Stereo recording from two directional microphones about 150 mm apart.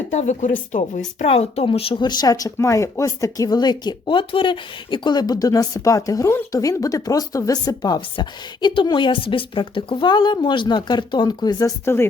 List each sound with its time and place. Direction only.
0.1 s speech: 50° left (ahead or behind)
1.2 s speech: 45° left (ahead or behind); by 11.7 s 25° left (ahead or behind)